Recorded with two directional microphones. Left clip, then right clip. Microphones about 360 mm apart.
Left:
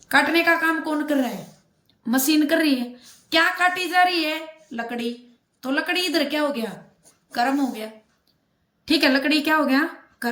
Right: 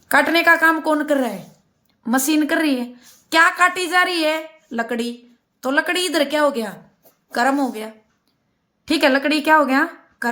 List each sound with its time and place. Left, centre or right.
0.1 s a woman's voice: centre